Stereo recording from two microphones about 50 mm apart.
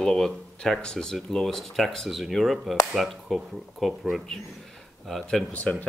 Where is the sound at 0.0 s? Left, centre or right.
Centre.